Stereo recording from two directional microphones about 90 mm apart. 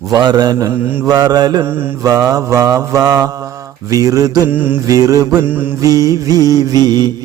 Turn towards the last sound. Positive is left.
turn(degrees=-50)  # may be behind; listen again after turning